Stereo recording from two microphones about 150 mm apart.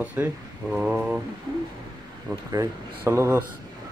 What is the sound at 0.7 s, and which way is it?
Mantra, 5° right (ahead or behind).